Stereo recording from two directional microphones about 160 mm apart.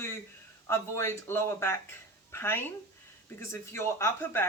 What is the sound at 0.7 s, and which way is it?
Speech, 15° left (ahead or behind).